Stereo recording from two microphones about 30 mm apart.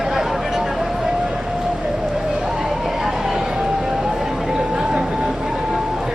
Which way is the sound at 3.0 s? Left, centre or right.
Centre.